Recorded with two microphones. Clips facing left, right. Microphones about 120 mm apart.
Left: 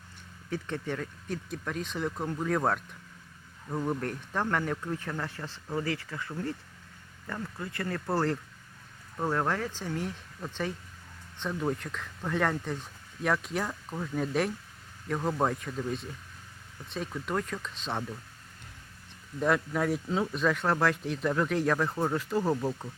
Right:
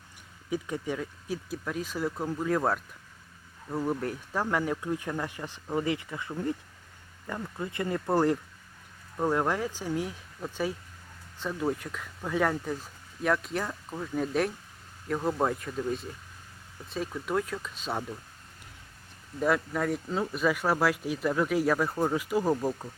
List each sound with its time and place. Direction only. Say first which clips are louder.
0.5 s speech: right 2 dB; 10° right (ahead or behind)
19.4 s speech: even; centre (ahead or behind)